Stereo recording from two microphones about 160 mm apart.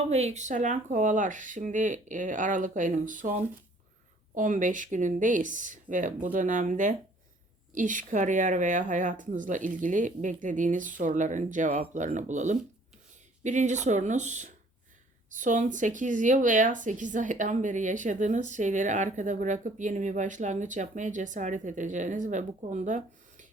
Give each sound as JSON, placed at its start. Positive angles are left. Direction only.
{"t": 0.1, "sound": "speech", "side_deg": -45}
{"t": 4.4, "sound": "speech", "side_deg": -55}